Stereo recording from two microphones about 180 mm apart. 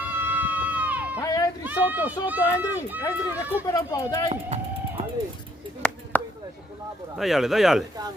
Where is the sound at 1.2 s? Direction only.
20° left (ahead or behind).